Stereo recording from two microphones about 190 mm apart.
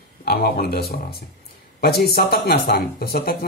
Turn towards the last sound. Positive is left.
turn(degrees=55)  # may be behind; listen again after turning